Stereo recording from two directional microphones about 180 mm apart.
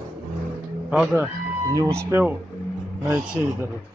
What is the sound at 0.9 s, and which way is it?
Speech, 10° right (ahead or behind).